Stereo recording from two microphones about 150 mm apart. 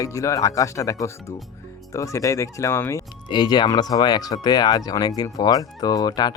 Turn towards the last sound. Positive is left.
turn(degrees=25)  # may be behind; listen again after turning